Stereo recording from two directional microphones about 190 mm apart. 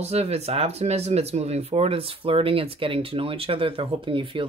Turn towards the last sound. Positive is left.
turn(degrees=-25)  # may be behind; listen again after turning